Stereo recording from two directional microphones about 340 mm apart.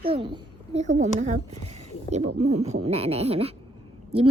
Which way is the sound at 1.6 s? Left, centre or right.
Centre.